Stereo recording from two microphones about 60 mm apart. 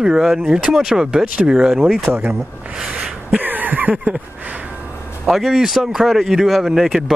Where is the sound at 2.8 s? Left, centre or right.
Centre.